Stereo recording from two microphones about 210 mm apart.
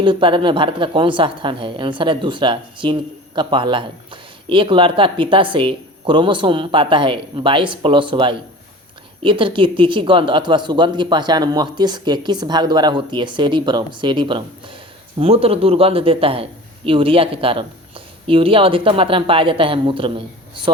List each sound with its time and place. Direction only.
0.0 s a woman's voice: 25° right (ahead or behind)